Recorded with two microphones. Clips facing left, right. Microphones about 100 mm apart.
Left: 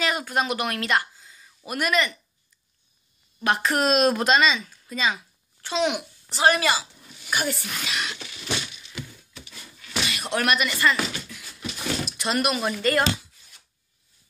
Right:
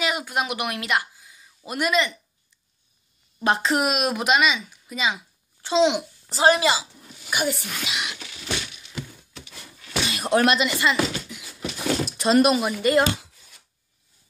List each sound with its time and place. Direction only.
0.0 s speech: 15° right (ahead or behind)
3.3 s speech: 25° right (ahead or behind)
3.8 s speech: 10° right (ahead or behind)
5.6 s a child's voice: 25° right (ahead or behind)
10.0 s speech: 35° right (ahead or behind); by 11.4 s 15° right (ahead or behind)
12.2 s speech: 30° right (ahead or behind)
12.5 s speech: 15° right (ahead or behind)